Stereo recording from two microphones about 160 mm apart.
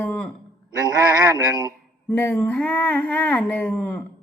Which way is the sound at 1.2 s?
20° right (ahead or behind).